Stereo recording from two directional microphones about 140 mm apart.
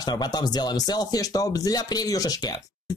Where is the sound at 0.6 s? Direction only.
25° left (ahead or behind).